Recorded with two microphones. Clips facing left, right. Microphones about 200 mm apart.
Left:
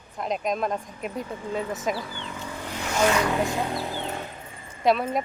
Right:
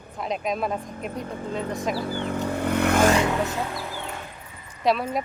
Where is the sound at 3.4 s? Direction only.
20° left (ahead or behind).